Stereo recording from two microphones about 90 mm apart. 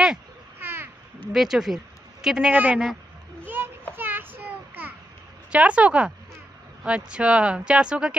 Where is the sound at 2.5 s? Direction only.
20° right (ahead or behind).